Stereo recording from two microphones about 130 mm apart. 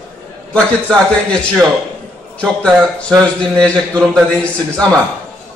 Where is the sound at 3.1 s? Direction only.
5° left (ahead or behind).